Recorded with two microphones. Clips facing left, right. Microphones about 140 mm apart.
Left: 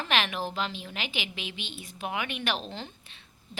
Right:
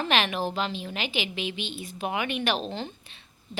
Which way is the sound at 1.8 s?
5° right (ahead or behind).